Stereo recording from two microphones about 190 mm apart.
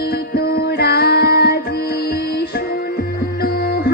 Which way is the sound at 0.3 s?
55° left (ahead or behind).